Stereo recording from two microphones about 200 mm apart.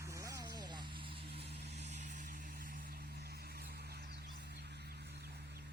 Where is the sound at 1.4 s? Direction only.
55° right (ahead or behind).